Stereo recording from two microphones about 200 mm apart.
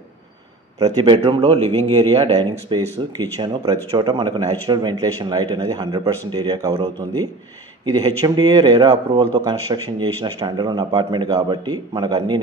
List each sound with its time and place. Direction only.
0.7 s speech: 20° right (ahead or behind)